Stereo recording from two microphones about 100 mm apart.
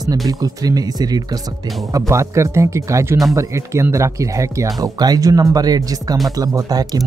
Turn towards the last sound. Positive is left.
turn(degrees=-35)  # may be behind; listen again after turning